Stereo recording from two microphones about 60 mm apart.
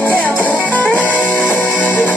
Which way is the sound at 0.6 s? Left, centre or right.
Left.